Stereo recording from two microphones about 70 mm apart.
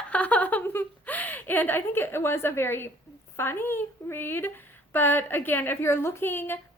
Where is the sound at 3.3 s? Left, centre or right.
Left.